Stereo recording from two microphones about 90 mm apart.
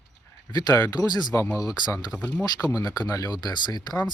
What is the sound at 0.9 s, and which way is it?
Speech, 50° left (ahead or behind).